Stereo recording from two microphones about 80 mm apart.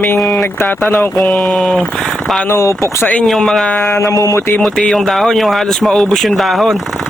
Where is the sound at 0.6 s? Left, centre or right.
Left.